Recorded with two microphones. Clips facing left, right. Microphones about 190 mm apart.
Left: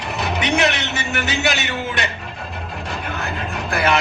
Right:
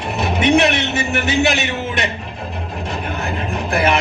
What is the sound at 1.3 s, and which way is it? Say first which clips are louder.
Music: right 6 dB; 20° right (ahead or behind).